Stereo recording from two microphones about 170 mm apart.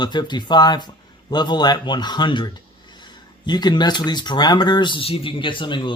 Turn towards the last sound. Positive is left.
turn(degrees=30)  # may be behind; listen again after turning